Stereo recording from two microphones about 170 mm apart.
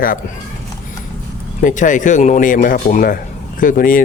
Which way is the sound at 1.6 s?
50° left (ahead or behind).